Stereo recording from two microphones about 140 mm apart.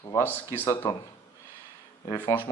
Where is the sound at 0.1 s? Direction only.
20° left (ahead or behind).